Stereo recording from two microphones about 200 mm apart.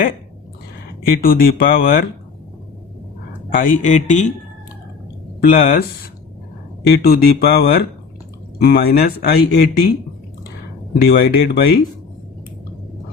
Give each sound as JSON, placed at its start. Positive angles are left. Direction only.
{"t": 1.0, "sound": "speech", "side_deg": 45}
{"t": 3.5, "sound": "speech", "side_deg": 45}
{"t": 5.4, "sound": "speech", "side_deg": 45}
{"t": 6.8, "sound": "speech", "side_deg": 50}
{"t": 10.9, "sound": "speech", "side_deg": 50}